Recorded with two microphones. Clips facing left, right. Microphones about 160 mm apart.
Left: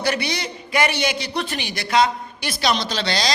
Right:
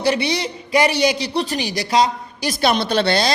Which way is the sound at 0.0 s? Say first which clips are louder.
Right 4 dB; 30° right (ahead or behind).